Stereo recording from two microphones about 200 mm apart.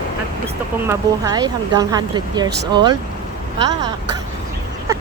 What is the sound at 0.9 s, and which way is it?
Speech, 20° right (ahead or behind).